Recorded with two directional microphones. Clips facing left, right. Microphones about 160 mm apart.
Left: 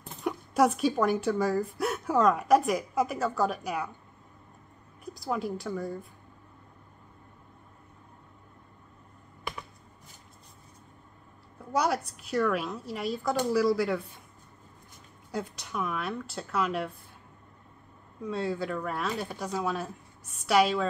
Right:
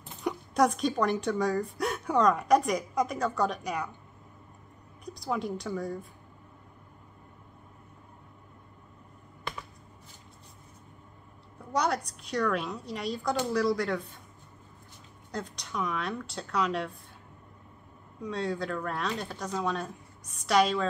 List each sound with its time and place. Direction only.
0.2 s speech: 5° left (ahead or behind)
5.0 s speech: centre (ahead or behind)
11.7 s speech: 5° left (ahead or behind)
15.3 s speech: 5° left (ahead or behind)
18.2 s speech: 5° left (ahead or behind)